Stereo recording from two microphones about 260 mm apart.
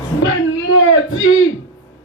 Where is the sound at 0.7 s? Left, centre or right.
Left.